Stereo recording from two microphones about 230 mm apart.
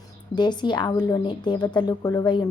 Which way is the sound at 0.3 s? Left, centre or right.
Centre.